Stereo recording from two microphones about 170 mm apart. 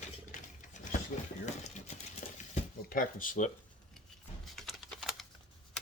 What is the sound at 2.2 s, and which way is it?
Dishes, 40° left (ahead or behind).